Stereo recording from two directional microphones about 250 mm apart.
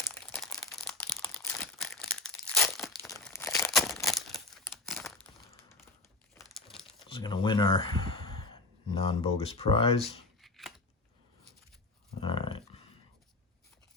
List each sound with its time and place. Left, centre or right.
0.0 s crumpling: centre
4.0 s a sound: centre
4.5 s crumpling: centre
6.5 s crumpling: centre
7.1 s speech: centre
12.2 s a sound: left